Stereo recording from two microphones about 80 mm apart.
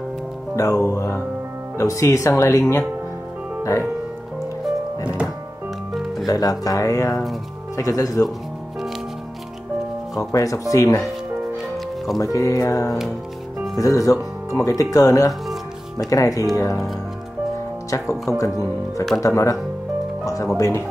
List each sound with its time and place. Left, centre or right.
0.6 s speech: left
5.9 s music: centre
6.2 s speech: left
10.1 s speech: left
12.2 s speech: left
17.8 s speech: left